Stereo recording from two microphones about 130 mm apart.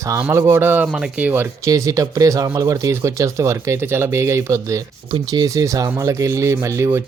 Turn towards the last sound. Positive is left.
turn(degrees=-20)  # may be behind; listen again after turning